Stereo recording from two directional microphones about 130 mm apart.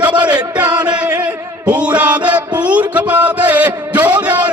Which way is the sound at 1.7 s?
10° right (ahead or behind).